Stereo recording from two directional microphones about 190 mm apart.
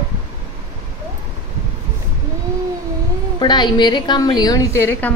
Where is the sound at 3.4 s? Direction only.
25° left (ahead or behind).